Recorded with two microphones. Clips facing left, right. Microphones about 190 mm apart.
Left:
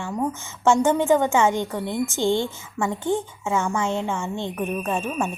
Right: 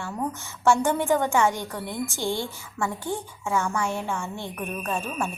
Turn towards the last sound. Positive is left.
turn(degrees=20)  # may be behind; listen again after turning